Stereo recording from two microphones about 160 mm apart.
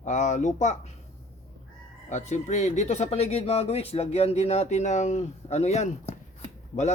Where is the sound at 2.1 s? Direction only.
50° left (ahead or behind).